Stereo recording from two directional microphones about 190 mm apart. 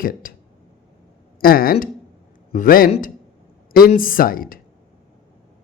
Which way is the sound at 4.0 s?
50° left (ahead or behind).